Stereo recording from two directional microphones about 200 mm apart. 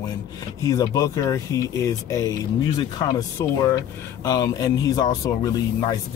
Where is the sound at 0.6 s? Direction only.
15° left (ahead or behind).